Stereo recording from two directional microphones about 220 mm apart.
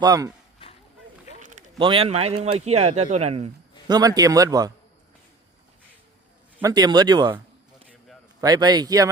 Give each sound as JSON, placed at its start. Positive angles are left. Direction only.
{"t": 0.0, "sound": "a man's voice", "side_deg": -15}
{"t": 1.8, "sound": "a man's voice", "side_deg": -25}
{"t": 3.8, "sound": "a man's voice", "side_deg": -20}
{"t": 6.6, "sound": "a man's voice", "side_deg": -15}